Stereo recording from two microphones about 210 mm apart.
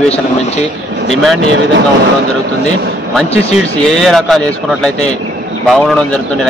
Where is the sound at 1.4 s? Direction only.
60° right (ahead or behind).